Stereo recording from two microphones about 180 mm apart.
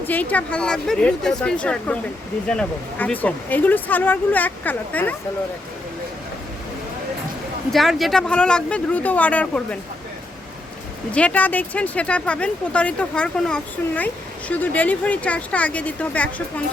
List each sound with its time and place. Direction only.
0.0 s speech: 10° left (ahead or behind)
7.7 s speech: centre (ahead or behind)
11.1 s speech: 10° left (ahead or behind)